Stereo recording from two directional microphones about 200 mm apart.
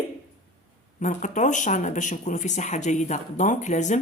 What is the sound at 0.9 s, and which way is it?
Speech, 35° left (ahead or behind).